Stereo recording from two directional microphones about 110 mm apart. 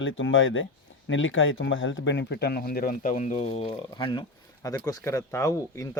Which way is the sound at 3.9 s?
45° left (ahead or behind).